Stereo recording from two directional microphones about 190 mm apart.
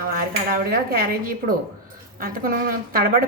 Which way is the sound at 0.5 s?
50° right (ahead or behind).